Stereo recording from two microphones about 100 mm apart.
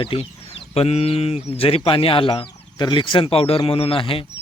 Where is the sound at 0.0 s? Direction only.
65° left (ahead or behind).